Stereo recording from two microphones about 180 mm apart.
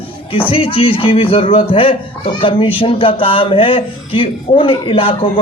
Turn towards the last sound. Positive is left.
turn(degrees=30)  # may be behind; listen again after turning